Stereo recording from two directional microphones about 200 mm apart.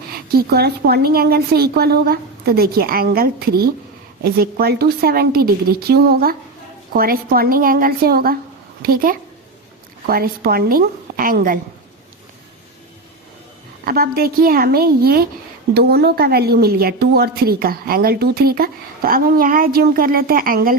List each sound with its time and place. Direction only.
0.1 s a woman's voice: 50° right (ahead or behind)
13.8 s a woman's voice: 50° right (ahead or behind)